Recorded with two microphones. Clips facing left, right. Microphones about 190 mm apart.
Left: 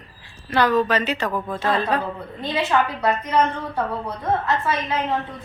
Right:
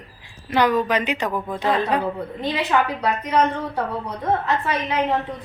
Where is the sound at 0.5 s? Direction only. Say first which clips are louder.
Even; 15° right (ahead or behind).